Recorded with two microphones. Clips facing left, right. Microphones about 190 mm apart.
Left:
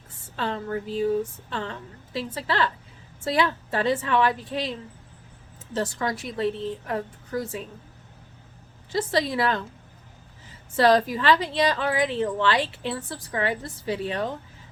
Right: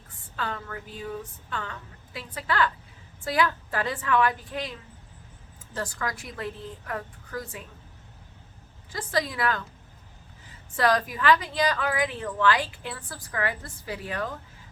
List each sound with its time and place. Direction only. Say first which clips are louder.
0.3 s a woman's voice: left 6 dB; 30° left (ahead or behind)
5.7 s a woman's voice: left 5 dB; 25° left (ahead or behind)
8.9 s a woman's voice: left 5 dB; 25° left (ahead or behind)
10.8 s a woman's voice: left 5 dB; 30° left (ahead or behind)